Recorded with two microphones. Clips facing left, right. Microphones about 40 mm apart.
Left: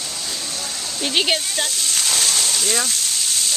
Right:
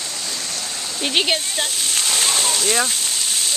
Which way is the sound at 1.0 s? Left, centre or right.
Centre.